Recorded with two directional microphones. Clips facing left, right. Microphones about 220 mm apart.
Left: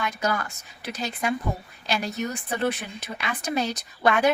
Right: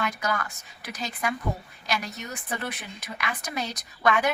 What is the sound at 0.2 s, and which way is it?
A woman's voice, 30° left (ahead or behind).